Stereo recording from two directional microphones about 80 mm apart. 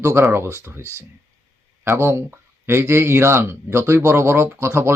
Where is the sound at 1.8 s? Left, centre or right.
Right.